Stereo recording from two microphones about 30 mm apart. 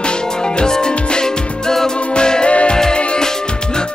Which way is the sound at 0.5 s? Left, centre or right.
Left.